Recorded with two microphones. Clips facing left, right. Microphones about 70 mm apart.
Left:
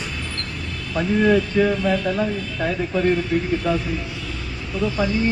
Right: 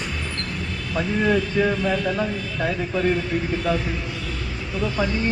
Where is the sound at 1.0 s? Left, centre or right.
Centre.